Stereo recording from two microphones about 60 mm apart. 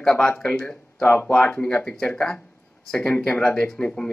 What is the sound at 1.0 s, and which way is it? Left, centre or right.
Speech, left.